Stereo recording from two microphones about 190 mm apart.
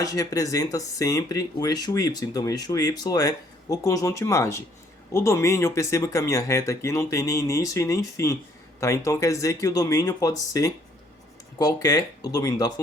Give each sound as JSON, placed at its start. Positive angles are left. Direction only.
{"t": 0.0, "sound": "speech", "side_deg": 20}